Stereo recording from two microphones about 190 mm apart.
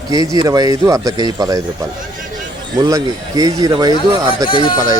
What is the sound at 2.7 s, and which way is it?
Speech, 20° right (ahead or behind).